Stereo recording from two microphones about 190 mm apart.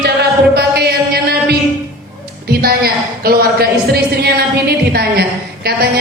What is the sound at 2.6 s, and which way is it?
Music, 55° right (ahead or behind).